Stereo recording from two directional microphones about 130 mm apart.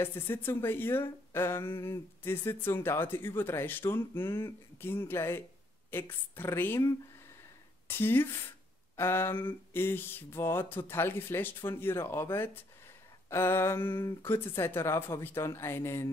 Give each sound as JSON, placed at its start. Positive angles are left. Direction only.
{"t": 0.0, "sound": "speech", "side_deg": 15}